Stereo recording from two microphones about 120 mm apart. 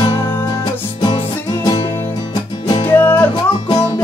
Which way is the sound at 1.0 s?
40° left (ahead or behind).